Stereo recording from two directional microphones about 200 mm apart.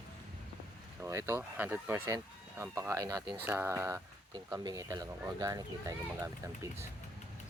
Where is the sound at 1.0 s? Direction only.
15° right (ahead or behind).